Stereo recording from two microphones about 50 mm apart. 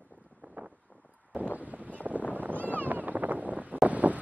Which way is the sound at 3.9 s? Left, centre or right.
Right.